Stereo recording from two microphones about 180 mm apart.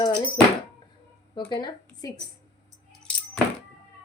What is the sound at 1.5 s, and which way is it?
Speech, 20° left (ahead or behind).